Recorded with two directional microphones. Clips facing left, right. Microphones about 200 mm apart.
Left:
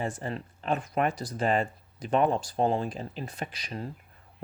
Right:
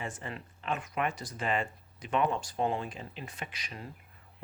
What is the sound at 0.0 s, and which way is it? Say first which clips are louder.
Speech: left 7 dB; 35° left (ahead or behind).